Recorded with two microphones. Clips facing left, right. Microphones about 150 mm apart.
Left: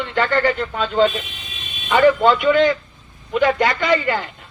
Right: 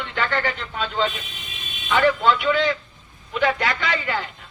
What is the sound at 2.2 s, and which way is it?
A man's voice, 45° left (ahead or behind).